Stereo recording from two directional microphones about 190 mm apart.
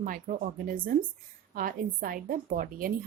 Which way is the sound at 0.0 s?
45° right (ahead or behind).